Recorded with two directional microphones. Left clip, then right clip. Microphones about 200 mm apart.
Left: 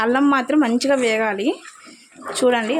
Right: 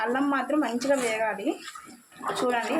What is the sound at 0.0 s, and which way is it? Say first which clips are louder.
Speech: left 9 dB; 50° left (ahead or behind).